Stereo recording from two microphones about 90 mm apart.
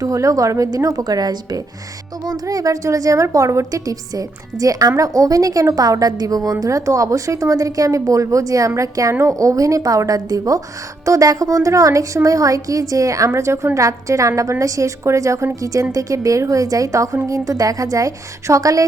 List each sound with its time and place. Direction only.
0.0 s a woman's voice: 40° right (ahead or behind)